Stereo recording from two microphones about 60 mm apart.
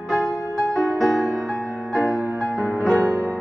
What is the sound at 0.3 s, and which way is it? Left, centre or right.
Music, left.